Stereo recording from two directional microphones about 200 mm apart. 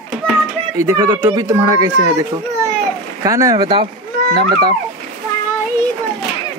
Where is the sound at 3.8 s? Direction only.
50° right (ahead or behind).